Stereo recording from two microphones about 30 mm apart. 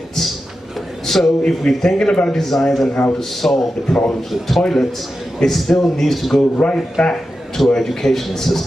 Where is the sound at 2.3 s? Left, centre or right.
Centre.